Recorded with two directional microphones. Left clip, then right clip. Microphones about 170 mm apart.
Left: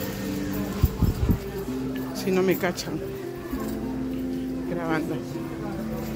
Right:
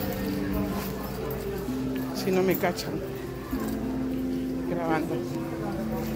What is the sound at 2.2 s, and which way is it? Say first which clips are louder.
Speech: left 2 dB; 50° left (ahead or behind).